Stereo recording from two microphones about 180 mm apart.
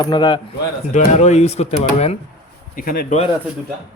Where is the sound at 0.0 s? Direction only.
25° left (ahead or behind).